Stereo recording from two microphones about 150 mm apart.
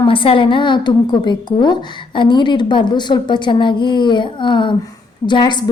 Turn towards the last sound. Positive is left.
turn(degrees=30)  # may be behind; listen again after turning